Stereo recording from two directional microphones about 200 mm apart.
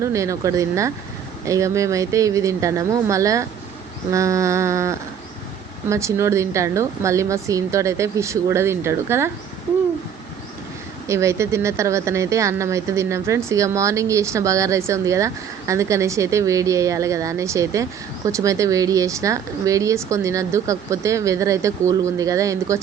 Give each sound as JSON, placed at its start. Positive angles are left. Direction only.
{"t": 0.0, "sound": "speech", "side_deg": -15}
{"t": 11.1, "sound": "speech", "side_deg": -15}